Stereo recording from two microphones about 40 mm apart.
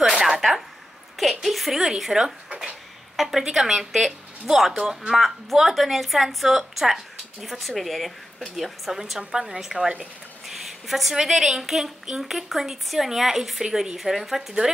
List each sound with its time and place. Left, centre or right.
0.1 s a sound: centre
0.4 s a woman's voice: centre
3.2 s a woman's voice: centre
9.3 s a woman's voice: centre
10.4 s a sound: centre
11.1 s a woman's voice: centre